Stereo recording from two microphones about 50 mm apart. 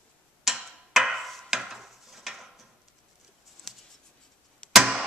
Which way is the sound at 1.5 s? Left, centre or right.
Centre.